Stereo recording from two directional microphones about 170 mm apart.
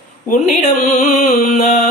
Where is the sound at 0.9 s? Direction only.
45° left (ahead or behind).